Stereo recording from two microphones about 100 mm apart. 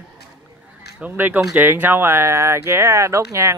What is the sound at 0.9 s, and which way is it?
Speech, 15° right (ahead or behind).